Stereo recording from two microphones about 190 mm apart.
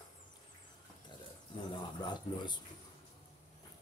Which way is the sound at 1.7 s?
25° left (ahead or behind).